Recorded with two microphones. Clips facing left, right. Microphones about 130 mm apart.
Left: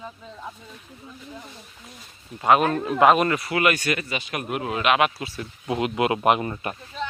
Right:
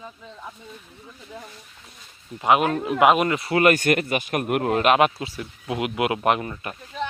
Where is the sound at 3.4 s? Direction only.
35° right (ahead or behind).